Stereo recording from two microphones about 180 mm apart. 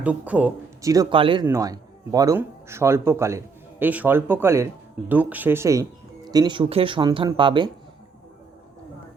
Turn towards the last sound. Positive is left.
turn(degrees=-25)  # may be behind; listen again after turning